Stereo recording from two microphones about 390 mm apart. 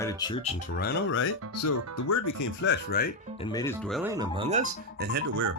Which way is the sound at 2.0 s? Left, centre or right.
Left.